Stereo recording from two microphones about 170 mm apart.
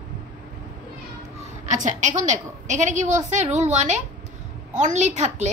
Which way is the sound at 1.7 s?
45° right (ahead or behind).